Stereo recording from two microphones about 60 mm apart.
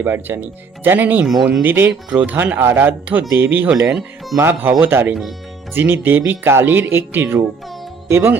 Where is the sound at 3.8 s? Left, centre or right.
Centre.